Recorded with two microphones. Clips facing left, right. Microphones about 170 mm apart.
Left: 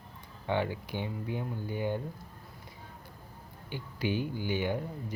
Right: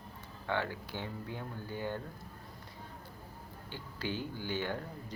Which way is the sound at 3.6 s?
15° left (ahead or behind).